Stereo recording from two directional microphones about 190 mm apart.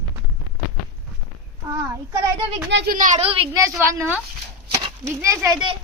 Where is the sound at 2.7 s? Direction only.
60° right (ahead or behind).